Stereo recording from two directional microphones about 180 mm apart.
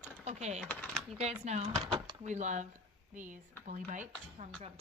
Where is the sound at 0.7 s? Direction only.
10° left (ahead or behind).